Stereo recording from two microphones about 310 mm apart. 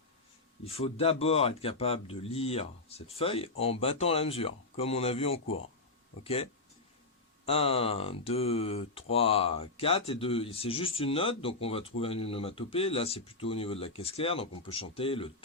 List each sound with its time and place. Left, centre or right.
0.6 s speech: centre